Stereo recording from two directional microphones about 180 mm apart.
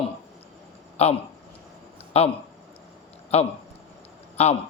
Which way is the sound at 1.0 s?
35° left (ahead or behind).